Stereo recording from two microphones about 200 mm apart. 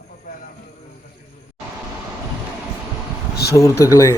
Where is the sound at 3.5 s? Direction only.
15° left (ahead or behind).